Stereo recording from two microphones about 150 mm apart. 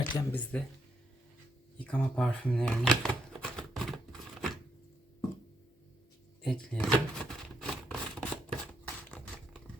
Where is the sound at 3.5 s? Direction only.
Centre (ahead or behind).